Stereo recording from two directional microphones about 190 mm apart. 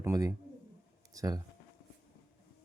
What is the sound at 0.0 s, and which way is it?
Speech, 15° right (ahead or behind).